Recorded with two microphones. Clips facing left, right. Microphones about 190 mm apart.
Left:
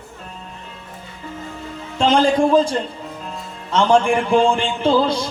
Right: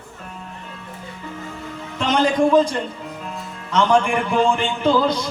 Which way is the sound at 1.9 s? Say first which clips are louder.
Left 3 dB; 30° left (ahead or behind).